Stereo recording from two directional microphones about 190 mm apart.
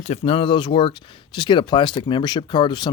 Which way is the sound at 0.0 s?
35° left (ahead or behind).